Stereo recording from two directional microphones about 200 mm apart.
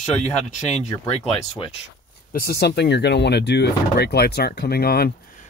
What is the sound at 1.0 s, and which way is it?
Speech, 30° left (ahead or behind).